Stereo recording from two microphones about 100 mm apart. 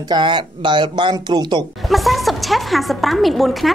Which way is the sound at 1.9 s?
Centre (ahead or behind).